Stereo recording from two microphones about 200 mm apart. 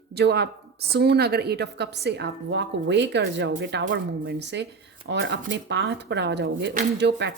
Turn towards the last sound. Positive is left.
turn(degrees=-60)  # may be behind; listen again after turning